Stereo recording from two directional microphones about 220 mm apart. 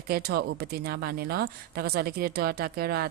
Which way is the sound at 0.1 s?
45° right (ahead or behind).